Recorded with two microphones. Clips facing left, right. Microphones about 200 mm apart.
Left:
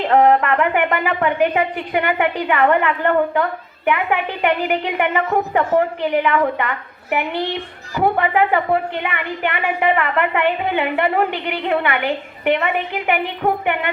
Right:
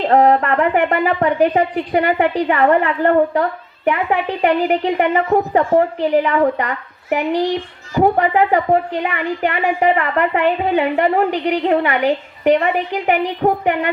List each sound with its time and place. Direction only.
0.0 s a woman's voice: 35° right (ahead or behind)